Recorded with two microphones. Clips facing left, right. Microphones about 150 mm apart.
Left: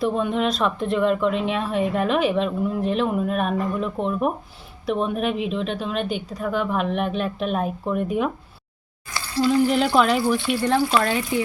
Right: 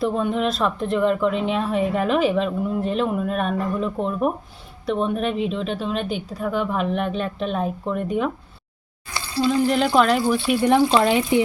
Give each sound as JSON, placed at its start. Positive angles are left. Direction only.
{"t": 0.0, "sound": "speech", "side_deg": 0}
{"t": 9.1, "sound": "stir", "side_deg": -20}
{"t": 9.5, "sound": "speech", "side_deg": 5}
{"t": 10.4, "sound": "speech", "side_deg": -15}